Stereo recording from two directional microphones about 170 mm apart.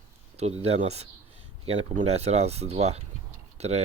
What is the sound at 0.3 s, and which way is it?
Speech, 40° right (ahead or behind).